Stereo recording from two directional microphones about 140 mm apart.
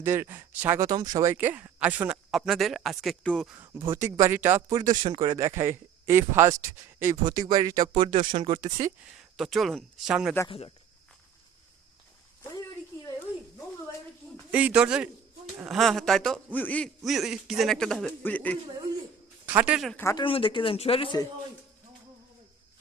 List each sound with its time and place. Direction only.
0.0 s speech: 15° right (ahead or behind)
0.9 s speech: 30° right (ahead or behind); by 2.1 s 10° right (ahead or behind)
2.3 s a man's voice: centre (ahead or behind)
3.7 s speech: 20° right (ahead or behind)
7.3 s speech: 30° right (ahead or behind)
8.0 s speech: 40° right (ahead or behind)
9.1 s speech: centre (ahead or behind)
12.4 s a sound: 25° left (ahead or behind)
14.5 s a man's voice: 10° right (ahead or behind); by 18.5 s 10° left (ahead or behind)
19.5 s speech: 10° right (ahead or behind)
20.2 s speech: 40° left (ahead or behind)